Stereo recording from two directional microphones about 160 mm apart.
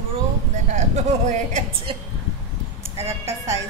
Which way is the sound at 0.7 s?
45° right (ahead or behind).